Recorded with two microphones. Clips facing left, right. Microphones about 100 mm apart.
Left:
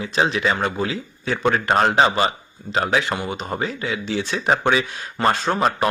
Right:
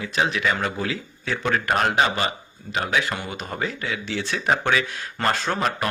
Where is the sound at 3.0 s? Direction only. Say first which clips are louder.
Left 4 dB; 20° left (ahead or behind).